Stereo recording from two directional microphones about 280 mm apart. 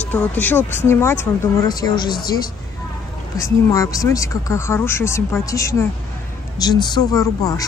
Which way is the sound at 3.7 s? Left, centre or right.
Centre.